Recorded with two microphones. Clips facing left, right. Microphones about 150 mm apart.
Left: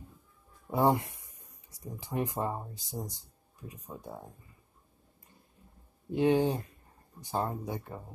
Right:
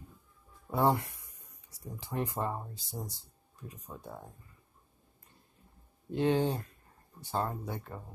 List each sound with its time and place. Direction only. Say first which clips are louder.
0.7 s speech: left 2 dB; 15° left (ahead or behind)
6.1 s speech: left 3 dB; 15° left (ahead or behind)